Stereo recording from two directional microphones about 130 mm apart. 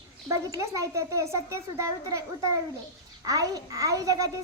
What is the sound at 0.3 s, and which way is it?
A child's voice, 25° right (ahead or behind).